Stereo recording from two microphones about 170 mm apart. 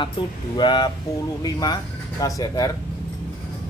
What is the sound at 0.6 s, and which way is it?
Speech, 25° left (ahead or behind).